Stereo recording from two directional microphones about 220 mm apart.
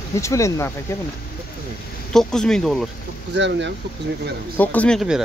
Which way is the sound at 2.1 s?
Centre (ahead or behind).